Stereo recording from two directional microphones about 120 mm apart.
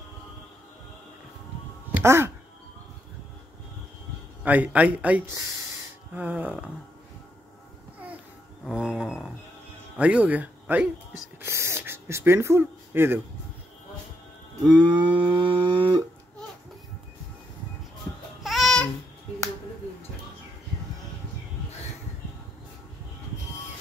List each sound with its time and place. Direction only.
2.0 s speech: 20° right (ahead or behind)
4.4 s a man's voice: 10° right (ahead or behind)
5.2 s speech: 25° right (ahead or behind)
6.1 s a sound: 15° right (ahead or behind)
8.6 s a sound: 5° right (ahead or behind)
9.9 s speech: 10° right (ahead or behind)
14.7 s cattle: 40° right (ahead or behind)
18.4 s babbling: centre (ahead or behind)